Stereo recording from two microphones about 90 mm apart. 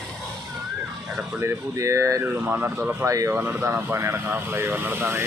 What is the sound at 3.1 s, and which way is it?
Speech, 35° right (ahead or behind).